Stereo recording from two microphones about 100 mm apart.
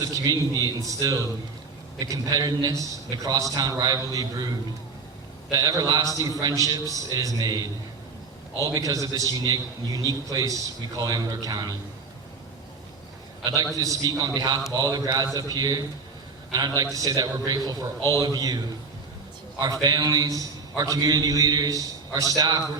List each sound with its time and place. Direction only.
0.0 s a man's voice: 40° right (ahead or behind)
5.5 s a man's voice: 40° right (ahead or behind)
13.4 s a man's voice: 40° right (ahead or behind)